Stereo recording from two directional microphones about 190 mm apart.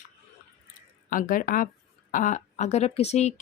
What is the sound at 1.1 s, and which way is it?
Speech, 45° left (ahead or behind).